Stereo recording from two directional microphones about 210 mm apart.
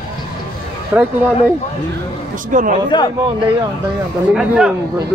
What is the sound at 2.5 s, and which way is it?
Speech, 40° right (ahead or behind).